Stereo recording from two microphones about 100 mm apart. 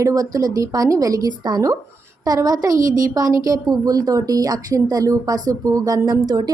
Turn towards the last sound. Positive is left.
turn(degrees=-40)  # may be behind; listen again after turning